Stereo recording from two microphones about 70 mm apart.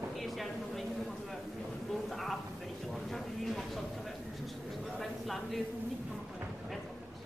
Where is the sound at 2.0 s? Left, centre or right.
Centre.